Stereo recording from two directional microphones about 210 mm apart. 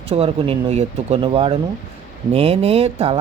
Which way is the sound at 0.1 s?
25° right (ahead or behind).